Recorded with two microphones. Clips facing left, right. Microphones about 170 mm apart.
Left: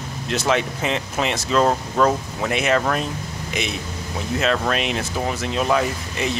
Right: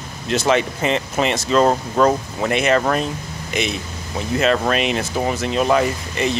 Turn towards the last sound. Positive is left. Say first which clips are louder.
# right 3 dB
turn(degrees=0)  # may be behind; listen again after turning